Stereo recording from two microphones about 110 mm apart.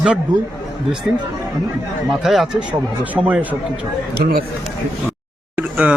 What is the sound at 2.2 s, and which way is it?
Speech, 5° right (ahead or behind).